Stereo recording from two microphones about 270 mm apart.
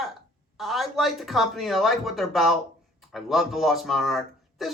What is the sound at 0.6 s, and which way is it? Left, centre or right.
Speech, centre.